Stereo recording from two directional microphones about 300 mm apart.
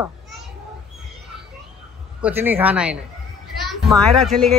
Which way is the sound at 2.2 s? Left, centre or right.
Centre.